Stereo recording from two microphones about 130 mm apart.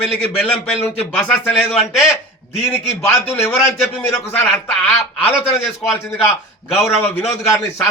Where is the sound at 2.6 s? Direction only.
20° left (ahead or behind).